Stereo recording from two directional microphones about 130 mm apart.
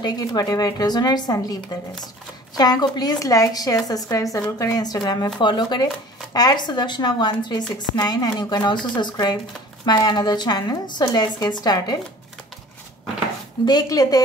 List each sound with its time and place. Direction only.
0.0 s a woman's voice: 30° left (ahead or behind)
13.7 s speech: 30° left (ahead or behind)